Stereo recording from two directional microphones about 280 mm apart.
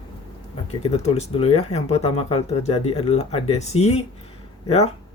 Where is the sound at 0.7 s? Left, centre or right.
Left.